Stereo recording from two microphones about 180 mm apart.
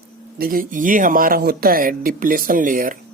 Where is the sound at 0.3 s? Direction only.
50° right (ahead or behind).